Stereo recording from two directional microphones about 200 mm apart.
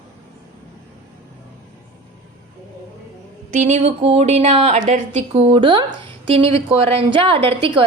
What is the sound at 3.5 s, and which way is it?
A woman's voice, 35° right (ahead or behind).